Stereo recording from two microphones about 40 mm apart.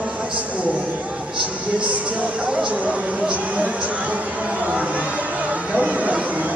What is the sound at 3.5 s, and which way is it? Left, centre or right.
Speech, right.